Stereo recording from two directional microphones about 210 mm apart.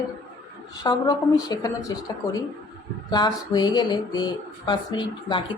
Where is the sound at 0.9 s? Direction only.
20° left (ahead or behind).